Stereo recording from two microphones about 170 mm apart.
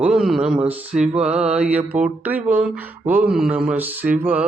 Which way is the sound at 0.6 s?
5° right (ahead or behind).